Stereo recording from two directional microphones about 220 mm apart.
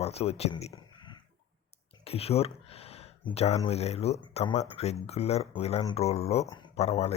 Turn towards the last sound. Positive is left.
turn(degrees=30)  # may be behind; listen again after turning